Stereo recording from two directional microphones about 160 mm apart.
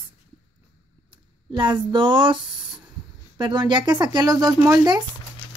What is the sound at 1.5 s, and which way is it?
Speech, 30° right (ahead or behind).